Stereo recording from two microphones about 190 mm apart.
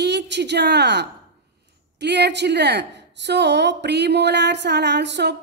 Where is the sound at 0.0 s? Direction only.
60° right (ahead or behind).